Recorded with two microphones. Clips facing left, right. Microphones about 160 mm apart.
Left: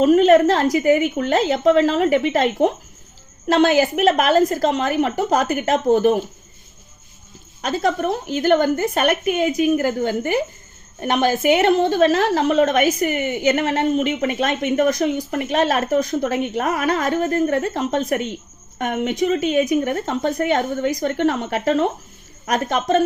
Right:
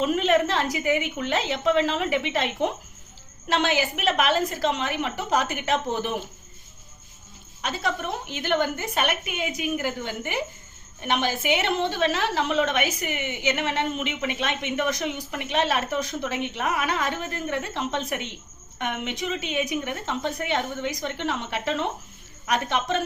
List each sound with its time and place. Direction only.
0.0 s a woman's voice: 40° left (ahead or behind)
7.6 s a woman's voice: 45° left (ahead or behind)